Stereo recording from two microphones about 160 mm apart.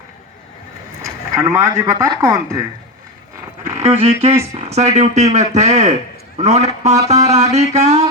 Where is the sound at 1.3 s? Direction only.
20° right (ahead or behind).